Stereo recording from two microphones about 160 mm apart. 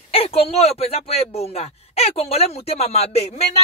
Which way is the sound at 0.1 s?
40° left (ahead or behind).